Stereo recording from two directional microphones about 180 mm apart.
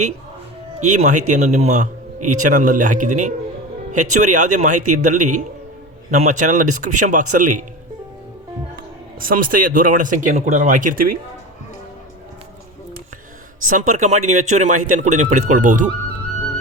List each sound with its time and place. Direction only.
0.8 s speech: 40° right (ahead or behind)
9.2 s speech: 50° right (ahead or behind)
13.7 s speech: 45° right (ahead or behind)